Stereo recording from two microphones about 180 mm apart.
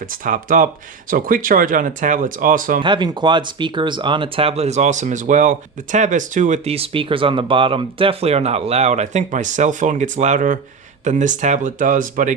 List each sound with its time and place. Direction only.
0.0 s speech: 50° right (ahead or behind)
2.8 s speech: 25° right (ahead or behind); by 12.3 s 50° right (ahead or behind)